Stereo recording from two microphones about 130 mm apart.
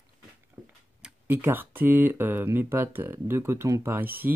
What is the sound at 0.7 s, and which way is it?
Speech, 15° right (ahead or behind).